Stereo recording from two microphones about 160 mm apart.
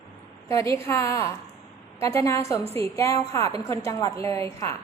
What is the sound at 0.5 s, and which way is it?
A woman's voice, 20° left (ahead or behind).